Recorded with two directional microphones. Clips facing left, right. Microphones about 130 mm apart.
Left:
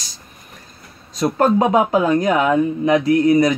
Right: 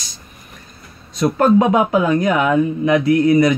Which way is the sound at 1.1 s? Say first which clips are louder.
Right 2 dB; 35° left (ahead or behind).